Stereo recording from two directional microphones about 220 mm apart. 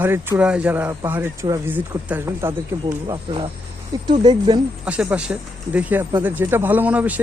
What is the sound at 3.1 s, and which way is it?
Speech, 25° right (ahead or behind).